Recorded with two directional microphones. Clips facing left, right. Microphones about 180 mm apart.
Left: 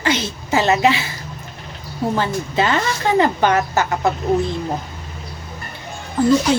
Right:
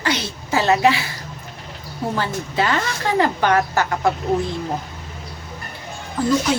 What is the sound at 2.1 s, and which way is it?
A woman's voice, 20° left (ahead or behind).